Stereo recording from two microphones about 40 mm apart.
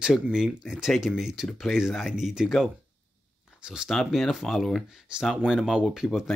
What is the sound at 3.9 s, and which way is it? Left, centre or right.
Speech, centre.